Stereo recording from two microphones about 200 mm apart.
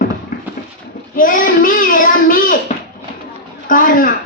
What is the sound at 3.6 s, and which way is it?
Speech, 45° left (ahead or behind).